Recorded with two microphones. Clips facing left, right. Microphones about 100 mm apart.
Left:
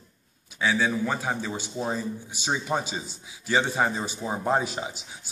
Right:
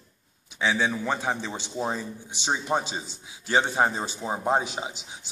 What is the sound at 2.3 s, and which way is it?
Speech, 20° right (ahead or behind).